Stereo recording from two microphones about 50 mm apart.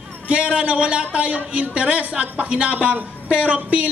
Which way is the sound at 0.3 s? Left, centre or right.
Right.